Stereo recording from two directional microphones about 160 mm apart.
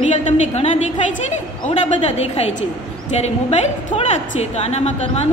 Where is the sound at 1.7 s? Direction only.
40° left (ahead or behind).